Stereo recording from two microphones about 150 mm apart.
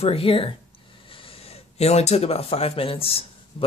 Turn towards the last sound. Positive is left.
turn(degrees=40)  # may be behind; listen again after turning